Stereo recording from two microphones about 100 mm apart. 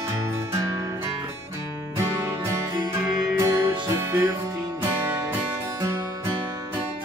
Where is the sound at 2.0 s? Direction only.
25° right (ahead or behind).